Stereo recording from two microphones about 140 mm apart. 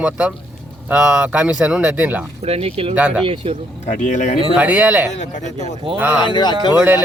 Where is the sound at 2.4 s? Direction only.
45° right (ahead or behind).